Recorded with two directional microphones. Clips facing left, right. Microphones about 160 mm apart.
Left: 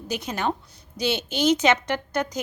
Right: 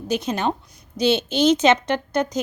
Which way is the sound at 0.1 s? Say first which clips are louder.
Right 4 dB; 20° right (ahead or behind).